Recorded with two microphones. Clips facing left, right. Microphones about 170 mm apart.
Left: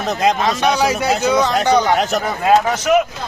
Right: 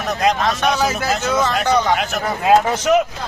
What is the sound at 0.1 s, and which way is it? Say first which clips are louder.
Speech: left 1 dB; 20° left (ahead or behind).